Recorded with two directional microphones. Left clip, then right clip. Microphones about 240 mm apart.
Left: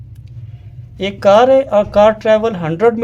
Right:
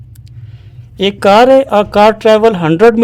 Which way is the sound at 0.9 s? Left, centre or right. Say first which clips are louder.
Right 3 dB; right.